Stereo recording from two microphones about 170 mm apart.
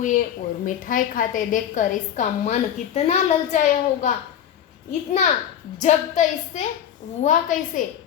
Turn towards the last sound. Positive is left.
turn(degrees=50)  # may be behind; listen again after turning